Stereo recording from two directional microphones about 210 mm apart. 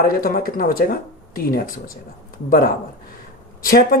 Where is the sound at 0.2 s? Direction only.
45° left (ahead or behind).